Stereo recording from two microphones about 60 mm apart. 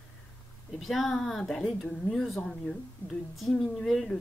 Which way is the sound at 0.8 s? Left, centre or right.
Centre.